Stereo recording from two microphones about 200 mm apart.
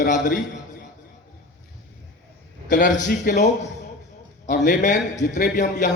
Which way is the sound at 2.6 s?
40° left (ahead or behind).